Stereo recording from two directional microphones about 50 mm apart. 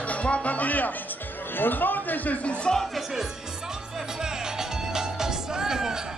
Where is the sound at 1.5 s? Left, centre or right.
Left.